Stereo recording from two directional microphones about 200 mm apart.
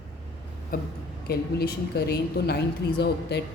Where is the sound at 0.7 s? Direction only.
50° left (ahead or behind).